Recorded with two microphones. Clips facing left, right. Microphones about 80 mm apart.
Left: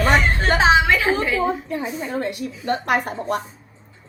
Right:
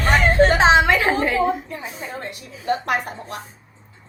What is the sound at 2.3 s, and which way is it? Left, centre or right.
Speech, left.